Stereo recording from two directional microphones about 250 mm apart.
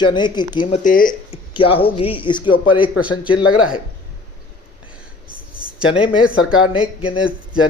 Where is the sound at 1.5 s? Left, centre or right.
Left.